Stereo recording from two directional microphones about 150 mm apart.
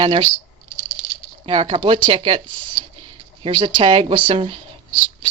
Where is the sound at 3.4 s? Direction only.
35° right (ahead or behind).